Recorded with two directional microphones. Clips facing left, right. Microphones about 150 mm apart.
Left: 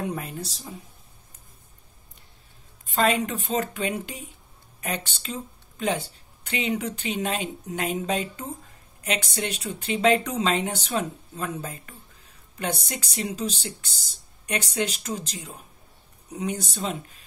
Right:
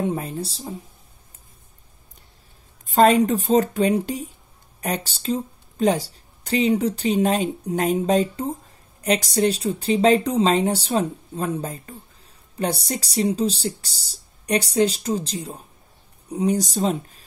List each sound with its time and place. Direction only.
0.2 s a woman's voice: 30° right (ahead or behind)
2.9 s a woman's voice: 40° right (ahead or behind)